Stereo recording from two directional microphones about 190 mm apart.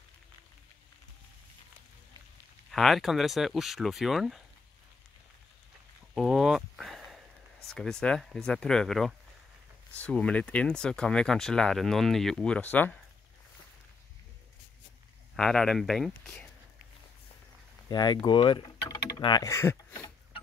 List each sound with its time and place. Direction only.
2.7 s speech: centre (ahead or behind)
6.1 s a sound: centre (ahead or behind)
7.6 s speech: 5° left (ahead or behind)
15.3 s speech: 5° left (ahead or behind)
17.8 s speech: 20° left (ahead or behind)